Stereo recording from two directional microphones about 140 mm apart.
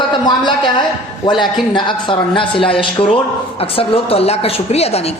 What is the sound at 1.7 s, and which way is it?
A man's voice, 35° left (ahead or behind).